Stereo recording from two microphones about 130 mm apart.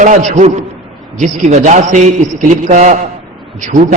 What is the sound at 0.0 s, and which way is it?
A man's voice, 70° right (ahead or behind).